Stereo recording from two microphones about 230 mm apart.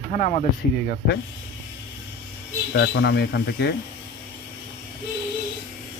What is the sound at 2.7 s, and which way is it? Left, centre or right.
Speech, left.